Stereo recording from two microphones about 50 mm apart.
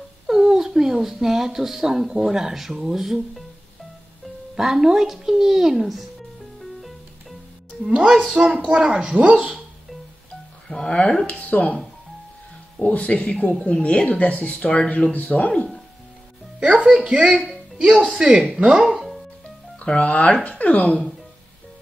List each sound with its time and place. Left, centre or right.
0.3 s speech: centre
4.6 s speech: centre
6.6 s music: centre
7.9 s speech: centre
10.9 s speech: centre
11.2 s speech: left
12.8 s speech: left
15.1 s speech: left
16.5 s speech: centre
18.9 s music: centre
19.8 s speech: left